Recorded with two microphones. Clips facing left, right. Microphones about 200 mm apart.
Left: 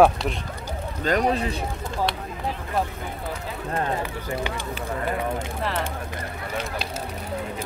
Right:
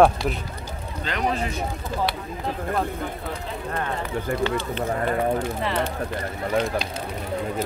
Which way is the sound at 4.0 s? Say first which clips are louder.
Right 4 dB; 15° left (ahead or behind).